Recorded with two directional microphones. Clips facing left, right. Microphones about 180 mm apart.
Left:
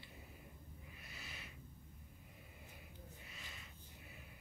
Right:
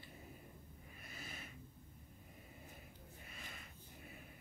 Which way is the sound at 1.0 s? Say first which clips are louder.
Right 4 dB; 50° right (ahead or behind).